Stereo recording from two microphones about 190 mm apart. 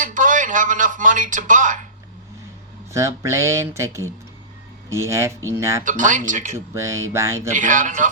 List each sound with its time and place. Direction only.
0.0 s speech: 45° right (ahead or behind)
2.9 s speech: 15° right (ahead or behind)
5.8 s speech: 40° right (ahead or behind)
6.7 s speech: 15° right (ahead or behind)
7.5 s speech: 45° right (ahead or behind)